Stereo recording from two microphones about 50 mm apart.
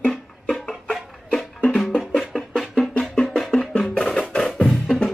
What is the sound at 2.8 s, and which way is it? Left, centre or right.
Music, centre.